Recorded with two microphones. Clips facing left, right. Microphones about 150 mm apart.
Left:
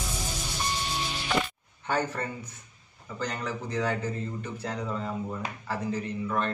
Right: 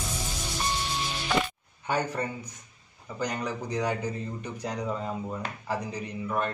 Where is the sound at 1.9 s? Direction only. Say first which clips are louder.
Even; 15° right (ahead or behind).